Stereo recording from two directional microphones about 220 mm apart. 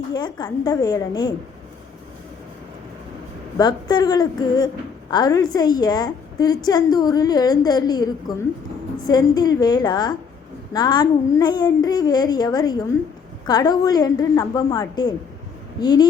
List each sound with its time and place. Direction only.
0.1 s a woman's voice: 20° left (ahead or behind)
3.6 s a woman's voice: 20° left (ahead or behind)